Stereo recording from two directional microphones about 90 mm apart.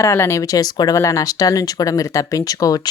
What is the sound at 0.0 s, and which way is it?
Speech, 35° left (ahead or behind).